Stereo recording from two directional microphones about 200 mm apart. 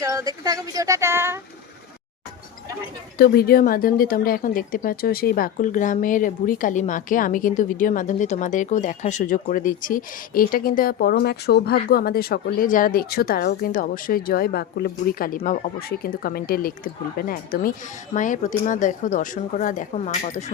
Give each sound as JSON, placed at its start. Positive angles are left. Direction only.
{"t": 0.0, "sound": "speech", "side_deg": -15}
{"t": 3.2, "sound": "speech", "side_deg": 50}